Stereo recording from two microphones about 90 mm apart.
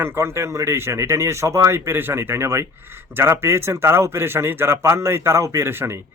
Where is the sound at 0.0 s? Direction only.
30° right (ahead or behind).